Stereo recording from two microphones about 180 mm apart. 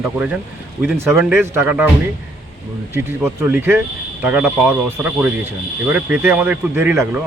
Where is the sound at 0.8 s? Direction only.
10° right (ahead or behind).